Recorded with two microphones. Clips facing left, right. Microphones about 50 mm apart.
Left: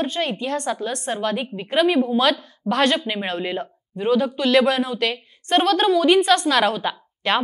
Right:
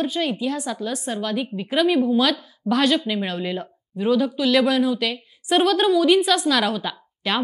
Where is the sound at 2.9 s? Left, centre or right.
Left.